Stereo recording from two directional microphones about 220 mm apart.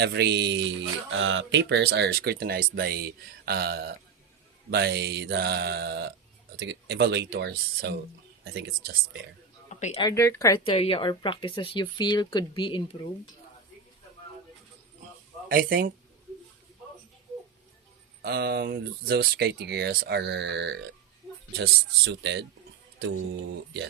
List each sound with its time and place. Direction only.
0.0 s speech: 50° right (ahead or behind)
9.6 s a sound: 30° left (ahead or behind)
10.0 s speech: 15° left (ahead or behind)
10.6 s speech: 25° left (ahead or behind)
15.4 s speech: 40° right (ahead or behind)
18.2 s speech: 45° right (ahead or behind)